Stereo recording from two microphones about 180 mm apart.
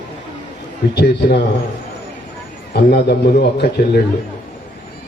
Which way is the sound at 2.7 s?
60° left (ahead or behind).